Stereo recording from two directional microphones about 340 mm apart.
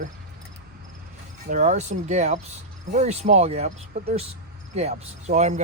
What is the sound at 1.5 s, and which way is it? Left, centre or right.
Speech, right.